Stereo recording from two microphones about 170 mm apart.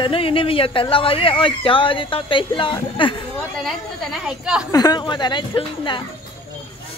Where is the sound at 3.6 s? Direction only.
Centre (ahead or behind).